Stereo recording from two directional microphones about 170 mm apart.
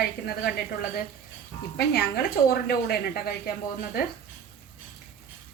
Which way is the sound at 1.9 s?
65° left (ahead or behind).